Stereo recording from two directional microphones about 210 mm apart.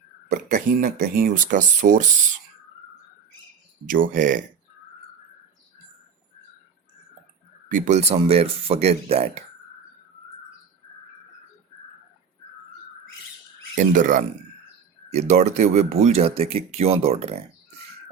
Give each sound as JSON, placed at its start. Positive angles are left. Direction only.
{"t": 0.3, "sound": "speech", "side_deg": -40}
{"t": 3.8, "sound": "speech", "side_deg": -40}
{"t": 7.7, "sound": "speech", "side_deg": -35}
{"t": 13.7, "sound": "speech", "side_deg": -40}